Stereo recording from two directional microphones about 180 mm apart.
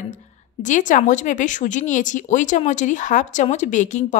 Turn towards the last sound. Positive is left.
turn(degrees=40)  # may be behind; listen again after turning